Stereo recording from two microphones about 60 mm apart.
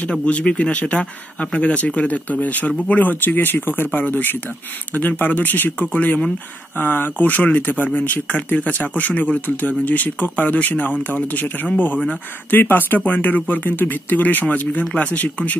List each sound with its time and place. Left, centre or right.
0.2 s speech: left